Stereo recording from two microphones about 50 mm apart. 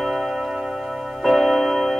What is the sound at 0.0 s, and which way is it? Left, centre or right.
Music, centre.